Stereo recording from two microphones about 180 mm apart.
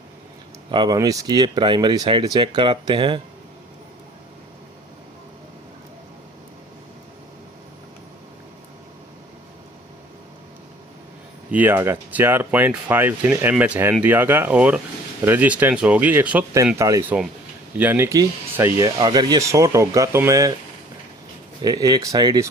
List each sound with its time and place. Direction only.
0.7 s speech: 25° right (ahead or behind)
11.5 s speech: 10° right (ahead or behind)
21.6 s speech: 20° right (ahead or behind)